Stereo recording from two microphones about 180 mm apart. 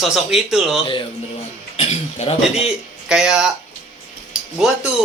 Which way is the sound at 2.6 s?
5° right (ahead or behind).